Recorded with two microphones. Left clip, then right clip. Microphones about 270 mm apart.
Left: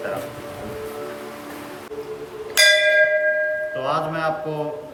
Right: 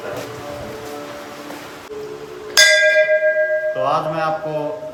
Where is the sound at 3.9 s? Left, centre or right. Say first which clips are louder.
Right 3 dB; centre.